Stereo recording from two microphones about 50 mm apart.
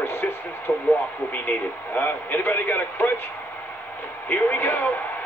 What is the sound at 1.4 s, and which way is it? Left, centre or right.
A man's voice, left.